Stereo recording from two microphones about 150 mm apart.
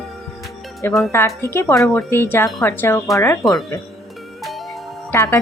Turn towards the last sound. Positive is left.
turn(degrees=20)  # may be behind; listen again after turning